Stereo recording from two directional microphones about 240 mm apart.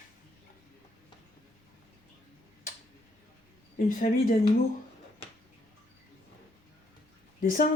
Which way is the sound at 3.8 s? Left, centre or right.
Left.